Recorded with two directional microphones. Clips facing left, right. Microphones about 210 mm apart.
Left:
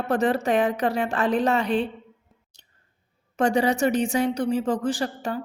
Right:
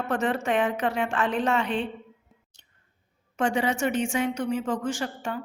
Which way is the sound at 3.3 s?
40° left (ahead or behind).